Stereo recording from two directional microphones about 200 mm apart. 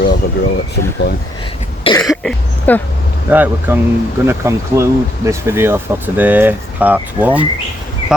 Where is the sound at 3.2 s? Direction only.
10° right (ahead or behind).